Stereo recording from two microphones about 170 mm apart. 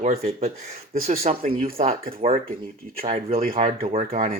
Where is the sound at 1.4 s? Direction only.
60° right (ahead or behind).